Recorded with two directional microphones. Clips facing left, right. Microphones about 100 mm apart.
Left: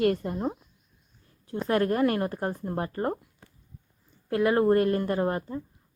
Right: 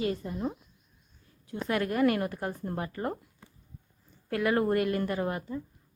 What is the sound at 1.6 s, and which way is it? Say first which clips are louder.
A woman's voice: left 2 dB; 35° left (ahead or behind).